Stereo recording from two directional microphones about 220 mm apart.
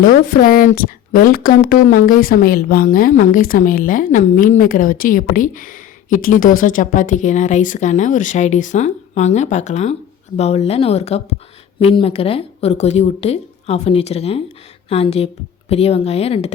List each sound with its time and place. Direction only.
0.0 s a woman's voice: 40° left (ahead or behind)